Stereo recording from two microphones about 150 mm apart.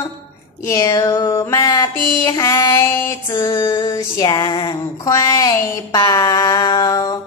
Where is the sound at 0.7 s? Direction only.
20° left (ahead or behind).